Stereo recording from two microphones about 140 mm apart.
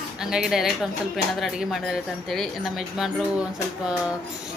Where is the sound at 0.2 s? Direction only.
5° right (ahead or behind).